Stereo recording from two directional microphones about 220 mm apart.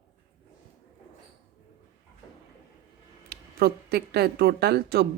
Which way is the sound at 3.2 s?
45° right (ahead or behind).